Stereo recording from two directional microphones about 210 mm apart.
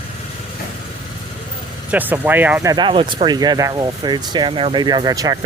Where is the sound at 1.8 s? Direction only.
10° right (ahead or behind).